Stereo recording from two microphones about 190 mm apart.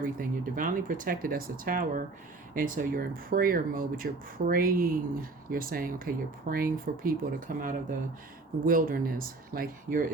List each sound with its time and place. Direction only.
0.2 s speech: 45° right (ahead or behind)